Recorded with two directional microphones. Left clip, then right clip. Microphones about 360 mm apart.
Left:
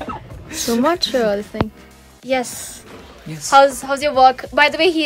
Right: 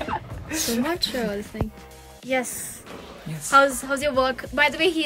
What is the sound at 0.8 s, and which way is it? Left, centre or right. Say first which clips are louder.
A woman's voice: left 9 dB; centre.